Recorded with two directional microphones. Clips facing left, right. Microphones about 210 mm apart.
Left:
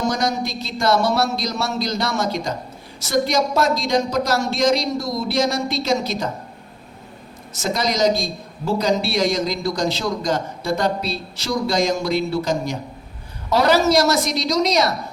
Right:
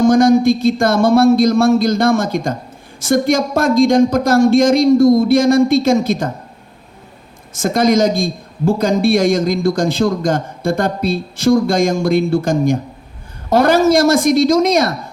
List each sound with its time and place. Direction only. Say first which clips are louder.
0.0 s a man's voice: right 12 dB; 50° right (ahead or behind)
7.6 s a man's voice: right 7 dB; 50° right (ahead or behind)